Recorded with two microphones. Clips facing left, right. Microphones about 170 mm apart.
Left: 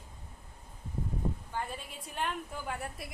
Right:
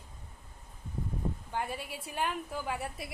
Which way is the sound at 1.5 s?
10° right (ahead or behind).